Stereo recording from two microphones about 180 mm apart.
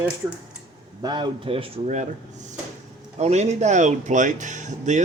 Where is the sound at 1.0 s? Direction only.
25° right (ahead or behind); by 5.0 s 40° right (ahead or behind).